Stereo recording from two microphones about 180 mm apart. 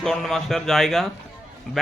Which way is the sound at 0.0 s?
Centre (ahead or behind).